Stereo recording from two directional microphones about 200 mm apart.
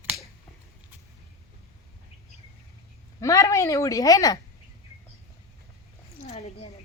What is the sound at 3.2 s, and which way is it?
A woman's voice, 15° left (ahead or behind).